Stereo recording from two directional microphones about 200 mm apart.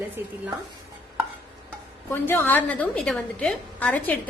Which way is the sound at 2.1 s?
10° left (ahead or behind).